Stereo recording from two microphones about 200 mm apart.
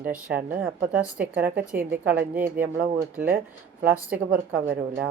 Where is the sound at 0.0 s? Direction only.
10° right (ahead or behind).